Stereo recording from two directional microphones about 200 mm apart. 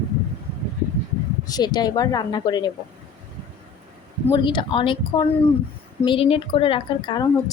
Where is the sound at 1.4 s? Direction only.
20° left (ahead or behind).